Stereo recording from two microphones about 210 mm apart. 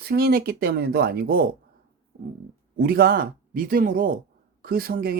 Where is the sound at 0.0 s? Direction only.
45° right (ahead or behind).